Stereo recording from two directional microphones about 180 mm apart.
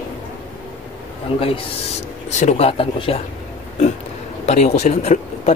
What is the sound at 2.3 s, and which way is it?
Speech, 40° left (ahead or behind).